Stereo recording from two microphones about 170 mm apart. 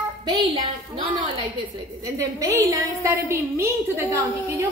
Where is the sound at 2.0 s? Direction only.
20° right (ahead or behind).